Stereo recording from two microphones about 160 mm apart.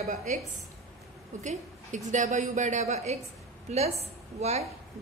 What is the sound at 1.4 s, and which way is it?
A woman's voice, 45° right (ahead or behind).